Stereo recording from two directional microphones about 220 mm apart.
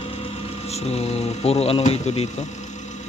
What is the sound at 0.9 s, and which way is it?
Speech, 30° left (ahead or behind).